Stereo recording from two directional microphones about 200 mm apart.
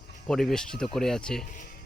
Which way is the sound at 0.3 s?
Centre (ahead or behind).